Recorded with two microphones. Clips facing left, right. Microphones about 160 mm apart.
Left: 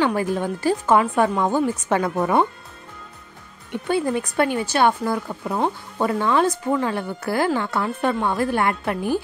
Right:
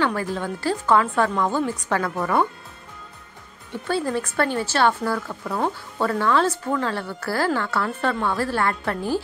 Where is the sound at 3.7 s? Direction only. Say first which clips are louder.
Left 2 dB; 15° left (ahead or behind).